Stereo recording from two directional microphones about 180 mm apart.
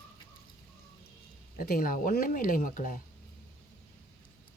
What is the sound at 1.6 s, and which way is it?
Speech, 50° left (ahead or behind).